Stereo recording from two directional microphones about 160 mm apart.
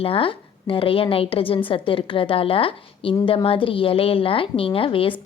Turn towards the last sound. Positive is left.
turn(degrees=35)  # may be behind; listen again after turning